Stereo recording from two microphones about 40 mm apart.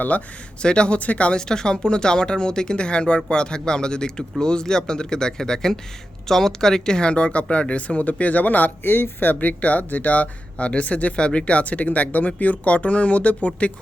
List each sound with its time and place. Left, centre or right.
0.1 s speech: left
0.6 s speech: left
1.4 s speech: centre; by 13.7 s left